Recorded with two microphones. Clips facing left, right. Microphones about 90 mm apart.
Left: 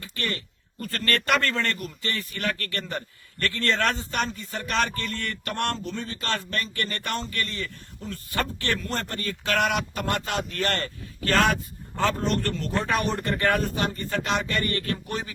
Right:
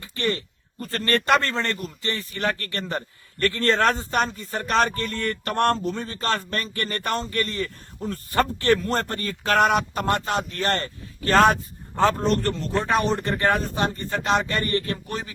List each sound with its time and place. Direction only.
0.0 s speech: 25° right (ahead or behind)